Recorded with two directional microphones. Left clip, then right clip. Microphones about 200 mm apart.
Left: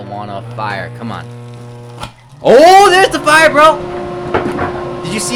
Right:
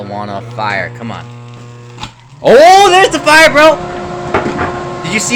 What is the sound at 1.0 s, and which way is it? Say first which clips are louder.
Speech: even; 15° left (ahead or behind).